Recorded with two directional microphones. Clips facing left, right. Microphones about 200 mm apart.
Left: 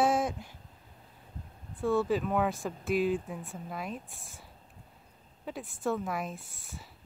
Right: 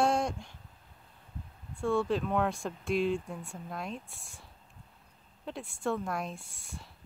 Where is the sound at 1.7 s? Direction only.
5° left (ahead or behind).